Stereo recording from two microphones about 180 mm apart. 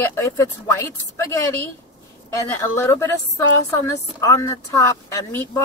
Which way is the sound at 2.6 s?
15° left (ahead or behind).